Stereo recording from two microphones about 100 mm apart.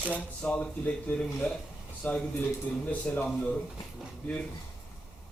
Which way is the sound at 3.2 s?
5° left (ahead or behind).